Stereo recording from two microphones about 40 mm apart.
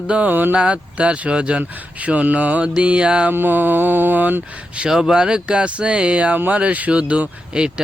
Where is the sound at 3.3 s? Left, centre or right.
Right.